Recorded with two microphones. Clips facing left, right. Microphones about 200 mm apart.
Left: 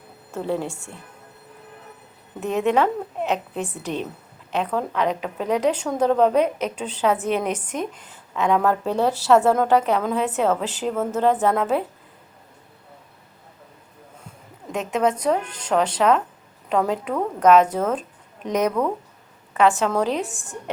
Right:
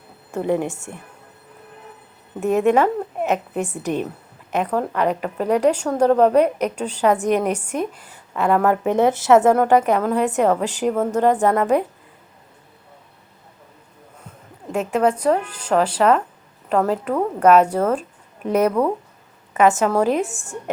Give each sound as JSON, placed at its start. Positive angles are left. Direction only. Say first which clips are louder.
{"t": 0.3, "sound": "a woman's voice", "louder": "right 4 dB", "side_deg": -15}
{"t": 2.4, "sound": "a woman's voice", "louder": "right 4 dB", "side_deg": -10}
{"t": 14.7, "sound": "a woman's voice", "louder": "right 3 dB", "side_deg": -5}